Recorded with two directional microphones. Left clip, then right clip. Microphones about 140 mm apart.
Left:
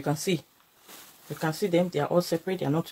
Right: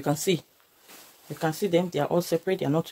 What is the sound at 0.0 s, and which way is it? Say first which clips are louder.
Speech: right 3 dB; 65° right (ahead or behind).